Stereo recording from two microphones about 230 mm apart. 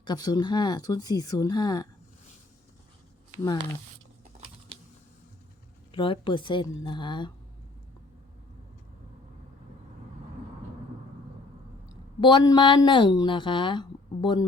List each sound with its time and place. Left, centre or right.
0.0 s speech: centre
4.2 s a sound: right
5.9 s a woman's voice: left
12.2 s a woman's voice: centre